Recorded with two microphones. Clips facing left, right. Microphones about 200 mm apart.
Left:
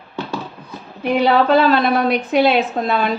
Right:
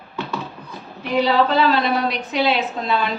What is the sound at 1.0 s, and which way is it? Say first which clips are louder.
A woman's voice: left 3 dB; 55° left (ahead or behind).